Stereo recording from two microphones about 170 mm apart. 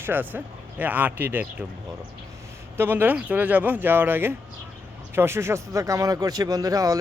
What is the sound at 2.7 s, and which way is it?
Speech, 10° right (ahead or behind).